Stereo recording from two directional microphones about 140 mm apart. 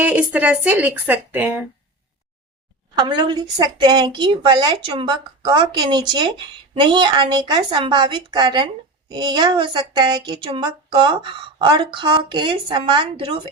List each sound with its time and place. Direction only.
0.0 s speech: 10° right (ahead or behind)
3.0 s a woman's voice: 30° right (ahead or behind)